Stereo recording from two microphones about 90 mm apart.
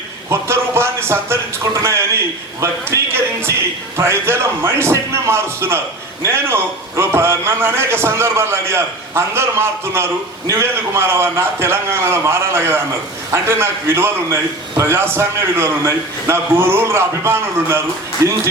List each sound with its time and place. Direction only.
0.3 s a man's voice: 30° right (ahead or behind)